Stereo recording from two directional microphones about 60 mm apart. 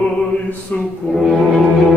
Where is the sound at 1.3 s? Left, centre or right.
Centre.